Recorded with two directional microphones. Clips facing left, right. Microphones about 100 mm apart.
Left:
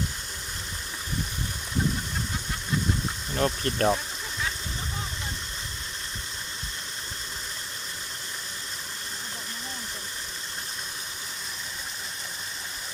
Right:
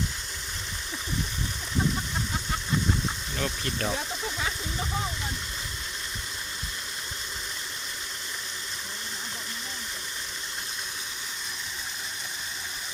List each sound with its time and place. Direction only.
3.3 s speech: 40° left (ahead or behind)